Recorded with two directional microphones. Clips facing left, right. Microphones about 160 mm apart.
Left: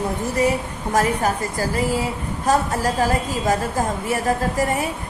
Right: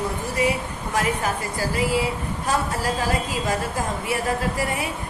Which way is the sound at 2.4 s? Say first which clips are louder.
Left 5 dB; 40° left (ahead or behind).